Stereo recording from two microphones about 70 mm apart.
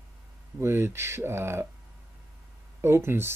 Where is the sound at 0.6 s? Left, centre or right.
Right.